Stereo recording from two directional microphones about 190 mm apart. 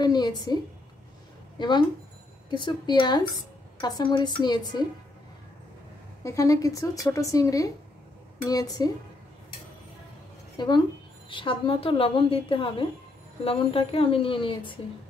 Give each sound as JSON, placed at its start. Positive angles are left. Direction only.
{"t": 0.0, "sound": "speech", "side_deg": 20}
{"t": 1.6, "sound": "speech", "side_deg": 25}
{"t": 6.2, "sound": "speech", "side_deg": 15}
{"t": 10.6, "sound": "speech", "side_deg": 25}